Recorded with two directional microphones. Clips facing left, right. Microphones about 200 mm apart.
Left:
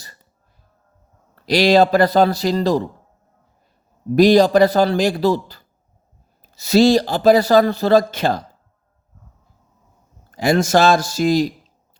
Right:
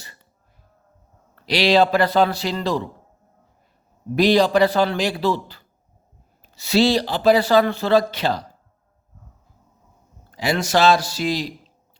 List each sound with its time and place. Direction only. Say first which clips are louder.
1.4 s a man's voice: left 3 dB; 45° left (ahead or behind)
4.1 s speech: left 5 dB; 45° left (ahead or behind)
10.3 s speech: left 5 dB; 45° left (ahead or behind)